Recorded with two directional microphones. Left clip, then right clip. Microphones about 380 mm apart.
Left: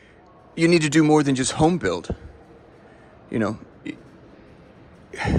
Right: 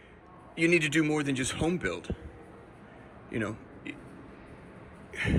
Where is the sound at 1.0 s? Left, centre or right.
Left.